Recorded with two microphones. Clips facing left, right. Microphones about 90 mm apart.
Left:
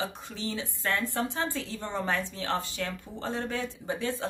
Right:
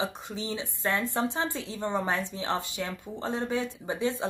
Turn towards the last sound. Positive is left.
turn(degrees=-20)  # may be behind; listen again after turning